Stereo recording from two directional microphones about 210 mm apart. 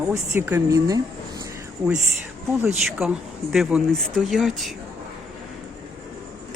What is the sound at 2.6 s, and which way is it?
Speech, 5° right (ahead or behind).